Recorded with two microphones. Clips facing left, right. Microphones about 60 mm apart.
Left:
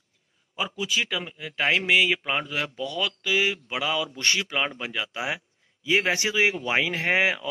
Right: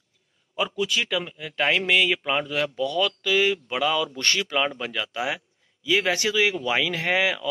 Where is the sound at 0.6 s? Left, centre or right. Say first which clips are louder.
Right 2 dB; centre.